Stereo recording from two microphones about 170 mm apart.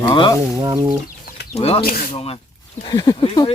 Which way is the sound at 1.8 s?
60° left (ahead or behind).